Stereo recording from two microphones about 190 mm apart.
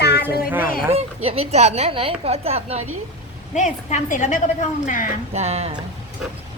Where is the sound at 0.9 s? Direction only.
30° right (ahead or behind).